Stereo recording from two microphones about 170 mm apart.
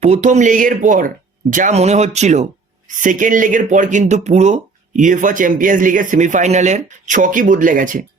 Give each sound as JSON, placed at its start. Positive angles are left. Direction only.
{"t": 0.0, "sound": "speech", "side_deg": -45}